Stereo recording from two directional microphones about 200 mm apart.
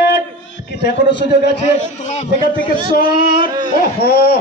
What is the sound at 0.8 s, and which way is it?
Speech, 60° left (ahead or behind).